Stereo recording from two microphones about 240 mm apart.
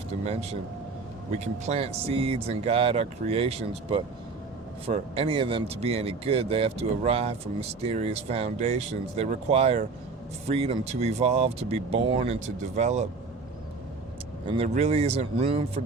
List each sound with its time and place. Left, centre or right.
1.6 s speech: right
14.4 s speech: right